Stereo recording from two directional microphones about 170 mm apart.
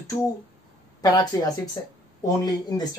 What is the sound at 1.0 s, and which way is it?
Speech, 25° left (ahead or behind).